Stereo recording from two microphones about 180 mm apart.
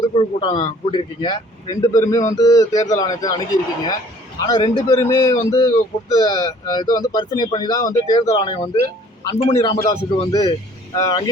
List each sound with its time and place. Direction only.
0.1 s a man's voice: 30° left (ahead or behind)
9.6 s speech: 20° left (ahead or behind)
10.9 s speech: 20° left (ahead or behind)